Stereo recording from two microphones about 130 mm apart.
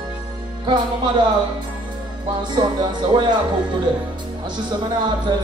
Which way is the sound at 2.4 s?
35° right (ahead or behind).